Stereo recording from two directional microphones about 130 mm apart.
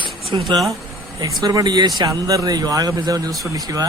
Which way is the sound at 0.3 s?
35° right (ahead or behind).